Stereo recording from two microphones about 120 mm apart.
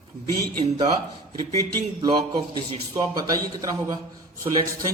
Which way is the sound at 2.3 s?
50° right (ahead or behind).